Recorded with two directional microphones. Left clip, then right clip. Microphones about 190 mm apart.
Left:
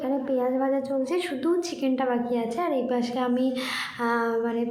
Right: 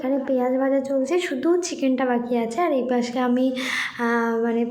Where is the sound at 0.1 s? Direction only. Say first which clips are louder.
Right 4 dB; 20° right (ahead or behind).